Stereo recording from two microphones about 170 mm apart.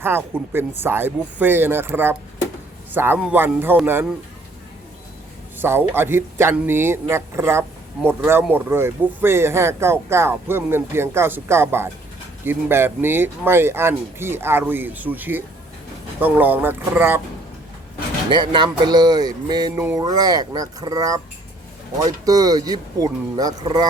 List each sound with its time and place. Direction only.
0.0 s speech: 15° right (ahead or behind)
5.5 s speech: 15° right (ahead or behind)
18.3 s speech: 25° right (ahead or behind)